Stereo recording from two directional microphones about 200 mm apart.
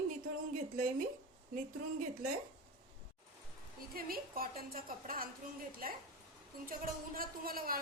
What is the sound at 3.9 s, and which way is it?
Speech, 45° right (ahead or behind).